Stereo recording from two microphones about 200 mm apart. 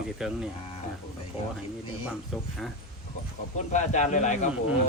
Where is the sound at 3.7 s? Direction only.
35° left (ahead or behind).